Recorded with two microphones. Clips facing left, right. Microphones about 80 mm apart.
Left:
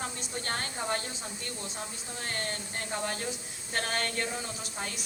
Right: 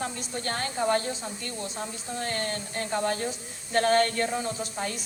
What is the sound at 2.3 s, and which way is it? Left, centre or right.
Speech, right.